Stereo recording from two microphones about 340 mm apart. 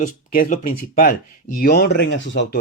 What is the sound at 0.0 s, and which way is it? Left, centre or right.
Speech, left.